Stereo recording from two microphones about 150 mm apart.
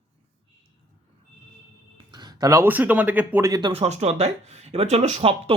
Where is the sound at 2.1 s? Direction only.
25° right (ahead or behind).